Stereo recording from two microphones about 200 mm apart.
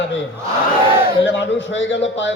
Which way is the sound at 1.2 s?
65° left (ahead or behind).